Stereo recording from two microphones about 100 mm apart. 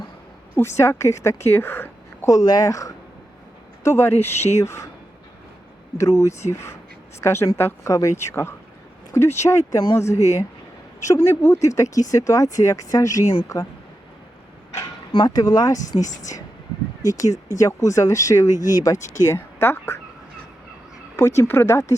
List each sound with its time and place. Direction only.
0.5 s speech: 25° left (ahead or behind)
6.0 s speech: 30° left (ahead or behind)
15.1 s speech: 45° left (ahead or behind); by 20.0 s 25° left (ahead or behind)
21.2 s speech: 30° left (ahead or behind)